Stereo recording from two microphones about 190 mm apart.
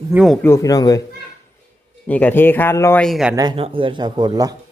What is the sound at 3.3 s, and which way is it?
Speech, 25° right (ahead or behind).